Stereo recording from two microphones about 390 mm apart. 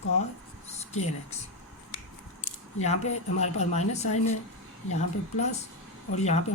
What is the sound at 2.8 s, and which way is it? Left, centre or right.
Speech, centre.